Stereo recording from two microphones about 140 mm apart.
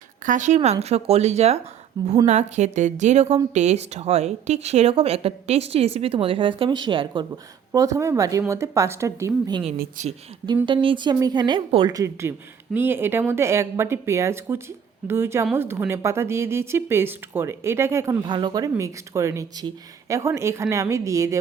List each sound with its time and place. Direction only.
0.3 s a woman's voice: 60° right (ahead or behind); by 7.3 s 35° right (ahead or behind)
7.7 s a woman's voice: 25° right (ahead or behind)
10.0 s a woman's voice: 65° right (ahead or behind)
10.4 s speech: 35° right (ahead or behind)
18.3 s a woman's voice: 35° right (ahead or behind)